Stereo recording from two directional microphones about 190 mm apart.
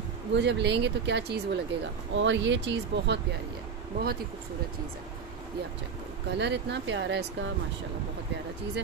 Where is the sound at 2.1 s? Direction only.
75° right (ahead or behind).